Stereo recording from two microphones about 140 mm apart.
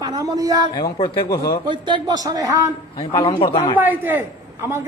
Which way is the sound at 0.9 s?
40° left (ahead or behind).